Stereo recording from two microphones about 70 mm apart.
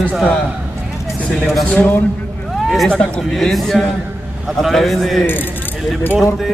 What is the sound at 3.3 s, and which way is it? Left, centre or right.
Speech, centre.